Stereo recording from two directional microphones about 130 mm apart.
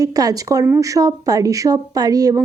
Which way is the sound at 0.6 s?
15° right (ahead or behind).